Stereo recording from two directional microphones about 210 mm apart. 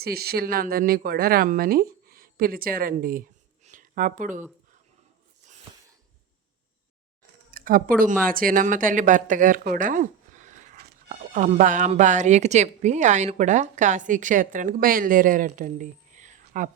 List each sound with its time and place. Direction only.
0.0 s speech: 50° right (ahead or behind)
7.5 s speech: 40° right (ahead or behind)